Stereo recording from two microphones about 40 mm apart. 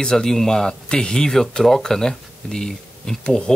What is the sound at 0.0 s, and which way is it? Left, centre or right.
Speech, centre.